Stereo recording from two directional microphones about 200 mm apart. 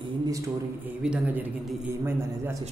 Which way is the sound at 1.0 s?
5° right (ahead or behind).